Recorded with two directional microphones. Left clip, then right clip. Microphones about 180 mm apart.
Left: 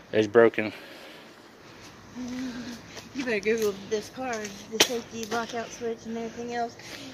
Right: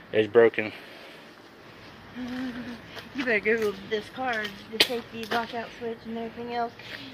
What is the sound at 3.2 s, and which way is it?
Speech, 45° left (ahead or behind).